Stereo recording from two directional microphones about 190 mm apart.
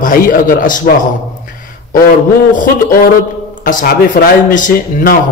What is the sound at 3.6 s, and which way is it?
A man's voice, 45° left (ahead or behind).